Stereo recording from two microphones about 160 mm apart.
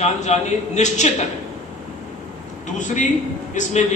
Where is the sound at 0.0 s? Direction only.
45° left (ahead or behind).